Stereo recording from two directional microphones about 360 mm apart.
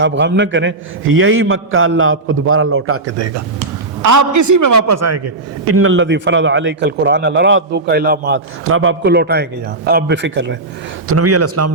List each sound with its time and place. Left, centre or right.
0.0 s a man's voice: right
5.7 s a man's voice: right
11.1 s a man's voice: right